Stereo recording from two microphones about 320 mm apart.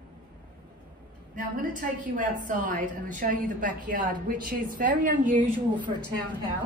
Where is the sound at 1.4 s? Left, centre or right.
Right.